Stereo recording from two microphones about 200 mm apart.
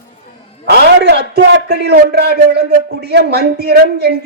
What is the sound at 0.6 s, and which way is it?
A man's voice, 55° right (ahead or behind).